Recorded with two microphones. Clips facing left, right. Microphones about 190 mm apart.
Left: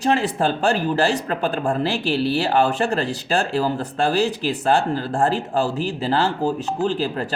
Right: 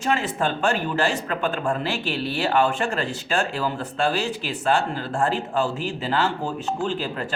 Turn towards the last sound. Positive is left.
turn(degrees=35)  # may be behind; listen again after turning